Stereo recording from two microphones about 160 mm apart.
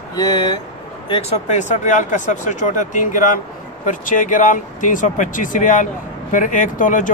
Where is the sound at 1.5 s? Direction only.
50° left (ahead or behind).